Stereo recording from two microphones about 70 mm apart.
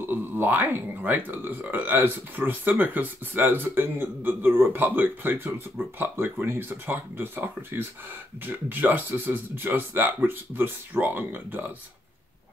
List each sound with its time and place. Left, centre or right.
0.0 s speech: right